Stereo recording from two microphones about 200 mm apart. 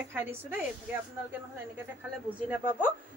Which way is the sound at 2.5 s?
10° right (ahead or behind).